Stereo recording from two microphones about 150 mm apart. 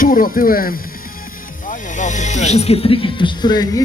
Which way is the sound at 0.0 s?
65° left (ahead or behind).